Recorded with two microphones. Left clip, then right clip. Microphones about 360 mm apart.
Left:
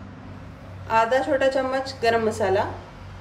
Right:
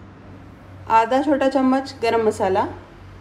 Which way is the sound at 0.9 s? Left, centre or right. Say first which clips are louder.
Right 3 dB; centre.